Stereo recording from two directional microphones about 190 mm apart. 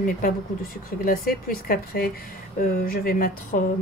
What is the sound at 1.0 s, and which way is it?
Speech, 50° left (ahead or behind).